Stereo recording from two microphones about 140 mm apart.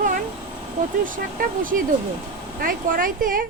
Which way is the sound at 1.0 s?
75° right (ahead or behind).